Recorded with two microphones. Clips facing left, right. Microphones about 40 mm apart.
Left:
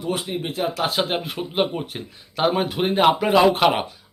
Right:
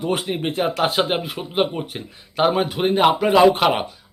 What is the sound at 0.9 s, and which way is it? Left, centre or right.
Speech, centre.